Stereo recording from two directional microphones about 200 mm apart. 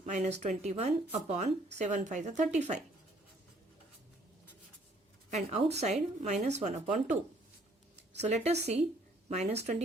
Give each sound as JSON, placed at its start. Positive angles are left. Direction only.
{"t": 0.0, "sound": "speech", "side_deg": -35}
{"t": 5.3, "sound": "speech", "side_deg": -30}
{"t": 8.2, "sound": "speech", "side_deg": -30}